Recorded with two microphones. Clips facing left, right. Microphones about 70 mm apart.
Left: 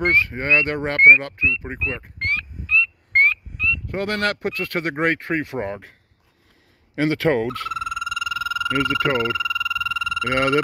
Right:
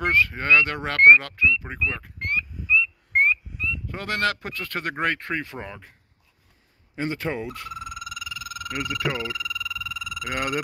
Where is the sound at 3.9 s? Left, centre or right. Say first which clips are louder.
Left 1 dB; left.